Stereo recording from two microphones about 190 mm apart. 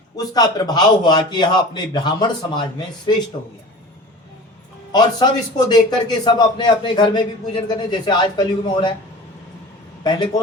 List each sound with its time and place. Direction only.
0.2 s a man's voice: 20° left (ahead or behind)
4.9 s a man's voice: 20° left (ahead or behind)
10.0 s a man's voice: 25° left (ahead or behind)